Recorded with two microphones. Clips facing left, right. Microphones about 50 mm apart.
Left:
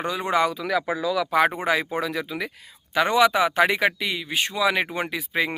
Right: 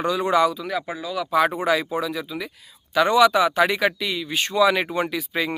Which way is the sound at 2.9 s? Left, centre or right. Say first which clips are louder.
Right 3 dB; left.